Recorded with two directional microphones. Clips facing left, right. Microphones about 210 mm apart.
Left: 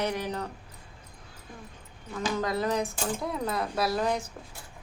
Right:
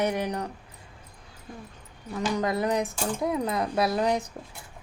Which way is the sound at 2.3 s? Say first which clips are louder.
Right 2 dB; 15° right (ahead or behind).